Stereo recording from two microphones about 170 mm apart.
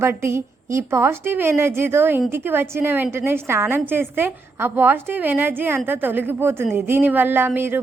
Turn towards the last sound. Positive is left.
turn(degrees=-10)  # may be behind; listen again after turning